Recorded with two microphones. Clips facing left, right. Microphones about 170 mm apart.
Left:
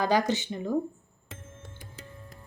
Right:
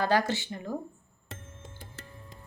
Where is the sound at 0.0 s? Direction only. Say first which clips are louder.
Left 1 dB; 15° left (ahead or behind).